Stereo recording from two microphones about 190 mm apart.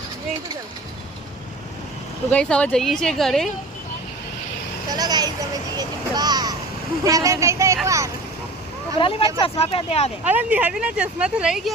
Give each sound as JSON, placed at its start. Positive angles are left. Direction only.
{"t": 2.3, "sound": "speech", "side_deg": 5}
{"t": 4.9, "sound": "vehicle", "side_deg": -20}
{"t": 7.0, "sound": "speech", "side_deg": -20}
{"t": 9.0, "sound": "speech", "side_deg": 25}
{"t": 10.2, "sound": "speech", "side_deg": -10}